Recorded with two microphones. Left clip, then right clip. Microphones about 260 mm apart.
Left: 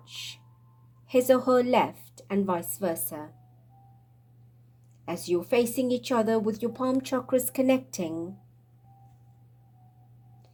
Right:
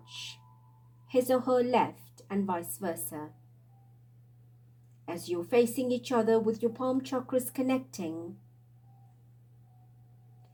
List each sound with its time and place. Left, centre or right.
0.0 s owl: left
1.0 s a woman's voice: left
5.0 s a woman's voice: left